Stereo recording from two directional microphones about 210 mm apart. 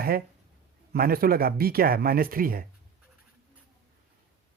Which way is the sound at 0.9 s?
45° right (ahead or behind).